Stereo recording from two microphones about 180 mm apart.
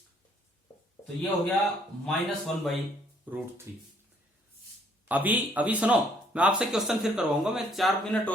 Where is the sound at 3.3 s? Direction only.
10° right (ahead or behind).